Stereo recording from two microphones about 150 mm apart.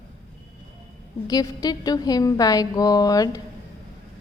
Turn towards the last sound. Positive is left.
turn(degrees=25)  # may be behind; listen again after turning